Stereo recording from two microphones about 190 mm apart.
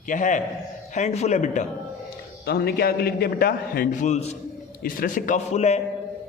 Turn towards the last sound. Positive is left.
turn(degrees=35)  # may be behind; listen again after turning